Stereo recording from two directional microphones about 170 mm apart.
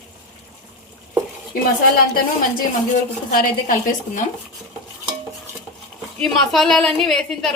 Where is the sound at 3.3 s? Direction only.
55° left (ahead or behind).